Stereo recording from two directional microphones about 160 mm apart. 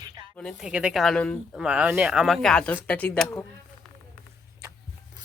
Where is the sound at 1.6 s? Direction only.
5° right (ahead or behind).